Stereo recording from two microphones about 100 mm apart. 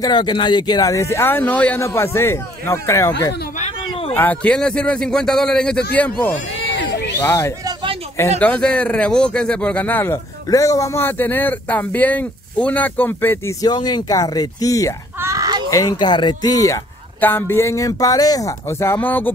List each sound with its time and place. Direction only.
0.0 s speech: 50° left (ahead or behind); by 1.8 s 15° left (ahead or behind)
1.8 s a man's voice: 25° left (ahead or behind)
8.4 s a man's voice: 10° left (ahead or behind)
10.5 s speech: 35° left (ahead or behind)
13.7 s speech: 45° left (ahead or behind)
15.2 s a sound: 35° right (ahead or behind)
15.7 s speech: 40° left (ahead or behind)
17.2 s speech: 20° left (ahead or behind)
18.9 s speech: 20° left (ahead or behind)